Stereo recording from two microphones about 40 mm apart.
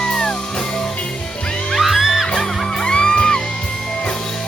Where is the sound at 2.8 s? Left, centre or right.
Left.